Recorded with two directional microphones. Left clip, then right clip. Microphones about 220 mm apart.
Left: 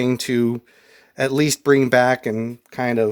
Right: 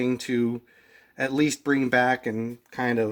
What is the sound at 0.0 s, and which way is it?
Speech, 45° left (ahead or behind).